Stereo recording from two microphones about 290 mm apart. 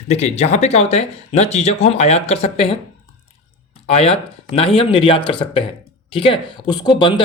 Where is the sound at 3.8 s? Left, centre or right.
Centre.